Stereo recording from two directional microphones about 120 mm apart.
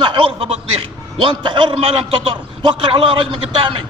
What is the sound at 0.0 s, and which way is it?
A man's voice, 45° right (ahead or behind).